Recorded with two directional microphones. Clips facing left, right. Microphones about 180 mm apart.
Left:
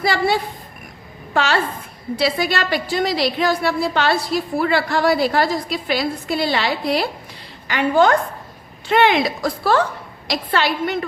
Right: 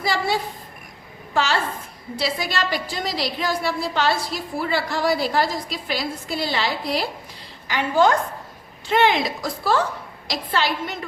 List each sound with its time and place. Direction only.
0.0 s a woman's voice: 65° left (ahead or behind)